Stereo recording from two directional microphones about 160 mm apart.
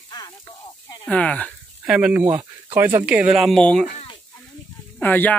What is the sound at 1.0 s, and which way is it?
Speech, 5° left (ahead or behind).